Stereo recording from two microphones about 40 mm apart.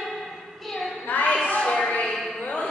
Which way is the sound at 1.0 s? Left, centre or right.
Left.